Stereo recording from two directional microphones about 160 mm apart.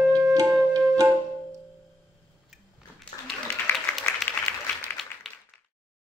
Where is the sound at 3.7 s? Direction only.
15° left (ahead or behind).